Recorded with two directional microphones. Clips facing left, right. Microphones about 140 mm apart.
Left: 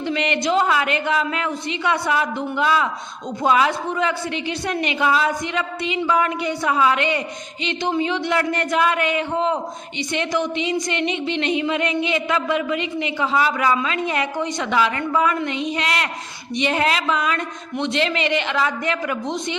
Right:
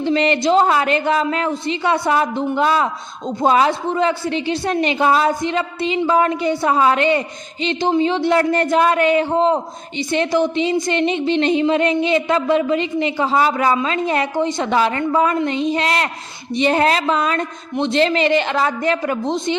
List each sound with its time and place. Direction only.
0.0 s a woman's voice: 35° right (ahead or behind)